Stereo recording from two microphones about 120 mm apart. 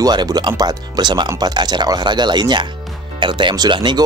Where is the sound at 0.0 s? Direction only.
35° right (ahead or behind).